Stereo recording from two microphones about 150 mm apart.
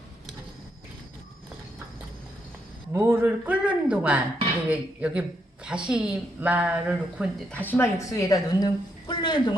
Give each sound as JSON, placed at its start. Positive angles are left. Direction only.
{"t": 2.9, "sound": "speech", "side_deg": -15}
{"t": 7.3, "sound": "a woman's voice", "side_deg": 10}